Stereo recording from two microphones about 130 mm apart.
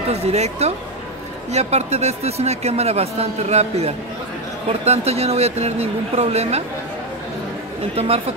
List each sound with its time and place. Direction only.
0.1 s a man's voice: 55° right (ahead or behind)
7.9 s speech: 50° right (ahead or behind)